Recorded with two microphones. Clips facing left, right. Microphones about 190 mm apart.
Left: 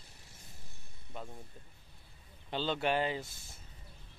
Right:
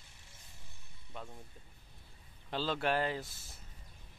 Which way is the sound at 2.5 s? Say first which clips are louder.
Left 1 dB; centre (ahead or behind).